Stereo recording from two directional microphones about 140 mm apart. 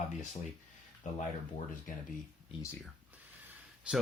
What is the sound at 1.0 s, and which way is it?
Speech, 65° left (ahead or behind).